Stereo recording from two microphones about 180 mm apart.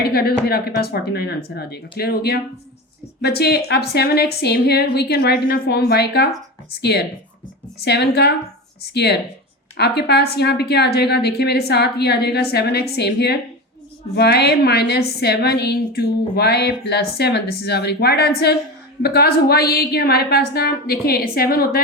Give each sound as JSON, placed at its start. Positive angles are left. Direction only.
{"t": 0.1, "sound": "a woman's voice", "side_deg": 60}
{"t": 7.8, "sound": "a woman's voice", "side_deg": 65}